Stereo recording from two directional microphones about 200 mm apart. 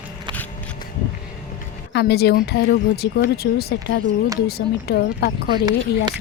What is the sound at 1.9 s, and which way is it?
Speech, 55° left (ahead or behind).